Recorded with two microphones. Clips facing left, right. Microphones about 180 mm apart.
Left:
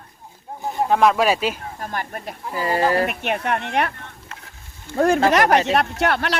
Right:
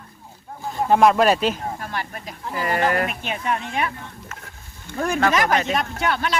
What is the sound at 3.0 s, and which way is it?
Speech, 65° left (ahead or behind).